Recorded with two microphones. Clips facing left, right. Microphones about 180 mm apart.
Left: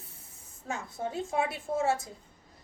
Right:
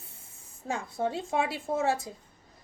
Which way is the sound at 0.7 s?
30° right (ahead or behind).